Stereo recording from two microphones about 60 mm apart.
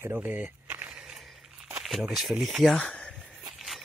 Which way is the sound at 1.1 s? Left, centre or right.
Centre.